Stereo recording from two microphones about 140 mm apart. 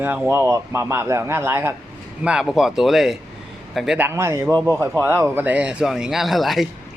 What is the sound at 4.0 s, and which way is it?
A man's voice, 15° right (ahead or behind).